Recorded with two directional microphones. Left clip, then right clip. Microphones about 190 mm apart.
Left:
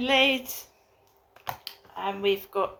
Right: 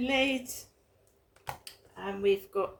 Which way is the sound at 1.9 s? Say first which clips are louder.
Left 2 dB; 35° right (ahead or behind).